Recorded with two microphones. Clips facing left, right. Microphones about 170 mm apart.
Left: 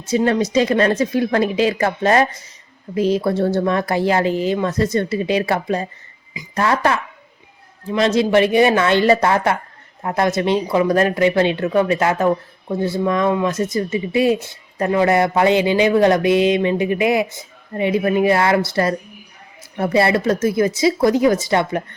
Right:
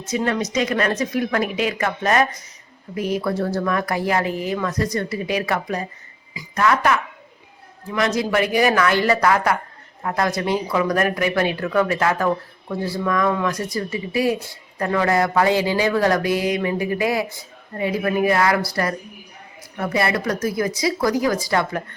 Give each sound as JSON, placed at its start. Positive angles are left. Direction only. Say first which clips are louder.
{"t": 0.0, "sound": "speech", "louder": "left 5 dB", "side_deg": 30}